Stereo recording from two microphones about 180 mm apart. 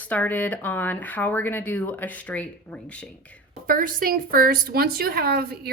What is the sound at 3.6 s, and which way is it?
Speech, 50° right (ahead or behind).